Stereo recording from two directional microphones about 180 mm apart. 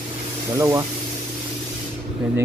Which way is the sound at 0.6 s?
15° right (ahead or behind).